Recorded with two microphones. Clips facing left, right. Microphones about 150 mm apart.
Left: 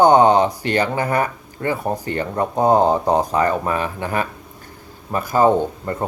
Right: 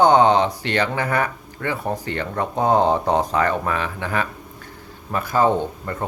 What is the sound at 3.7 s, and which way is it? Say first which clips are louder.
Speech: left 2 dB; 45° left (ahead or behind).